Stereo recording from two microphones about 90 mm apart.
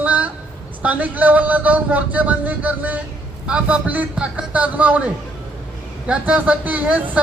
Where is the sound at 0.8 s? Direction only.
15° right (ahead or behind).